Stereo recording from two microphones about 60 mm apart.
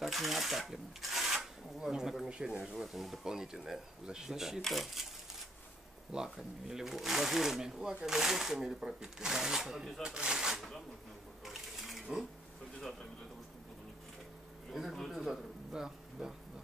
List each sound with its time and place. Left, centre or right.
0.0 s speech: centre
2.6 s speech: centre
6.1 s speech: centre
11.4 s sewing machine: centre
14.7 s speech: centre